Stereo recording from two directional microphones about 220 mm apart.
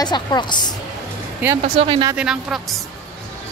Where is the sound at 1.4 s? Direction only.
5° right (ahead or behind).